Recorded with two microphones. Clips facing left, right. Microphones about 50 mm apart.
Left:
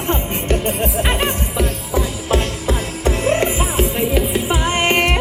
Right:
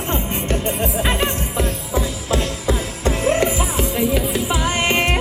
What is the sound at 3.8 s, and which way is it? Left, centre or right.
Music, centre.